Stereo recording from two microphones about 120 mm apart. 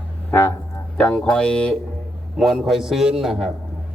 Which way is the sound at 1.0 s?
5° left (ahead or behind).